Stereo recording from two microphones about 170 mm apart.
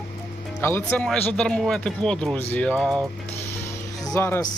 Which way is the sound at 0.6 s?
15° left (ahead or behind).